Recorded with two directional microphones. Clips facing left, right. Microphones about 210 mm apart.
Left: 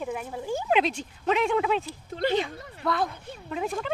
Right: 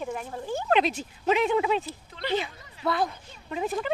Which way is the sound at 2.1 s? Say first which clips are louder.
Left 4 dB; 45° left (ahead or behind).